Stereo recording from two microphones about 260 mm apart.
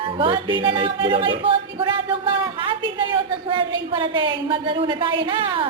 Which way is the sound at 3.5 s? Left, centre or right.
Centre.